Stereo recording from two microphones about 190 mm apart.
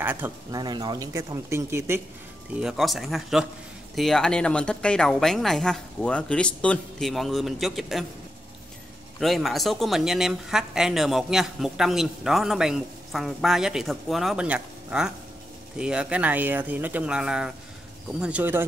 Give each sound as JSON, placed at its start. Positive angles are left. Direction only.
{"t": 0.0, "sound": "speech", "side_deg": -10}
{"t": 0.6, "sound": "speech", "side_deg": -20}
{"t": 2.6, "sound": "speech", "side_deg": 0}
{"t": 9.2, "sound": "speech", "side_deg": 0}